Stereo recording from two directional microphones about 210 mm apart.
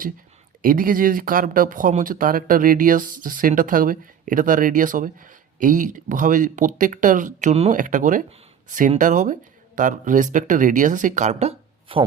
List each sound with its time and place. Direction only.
0.6 s speech: 40° right (ahead or behind); by 12.0 s 25° right (ahead or behind)